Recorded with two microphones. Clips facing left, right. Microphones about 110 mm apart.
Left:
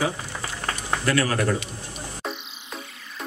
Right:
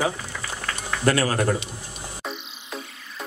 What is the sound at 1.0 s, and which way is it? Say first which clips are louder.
Speech: right 2 dB; 35° right (ahead or behind).